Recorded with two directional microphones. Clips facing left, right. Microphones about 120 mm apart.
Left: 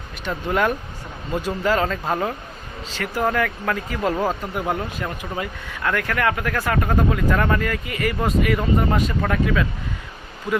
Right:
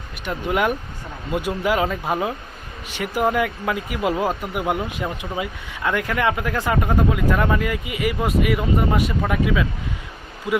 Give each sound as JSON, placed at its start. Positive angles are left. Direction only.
{"t": 0.3, "sound": "speech", "side_deg": -10}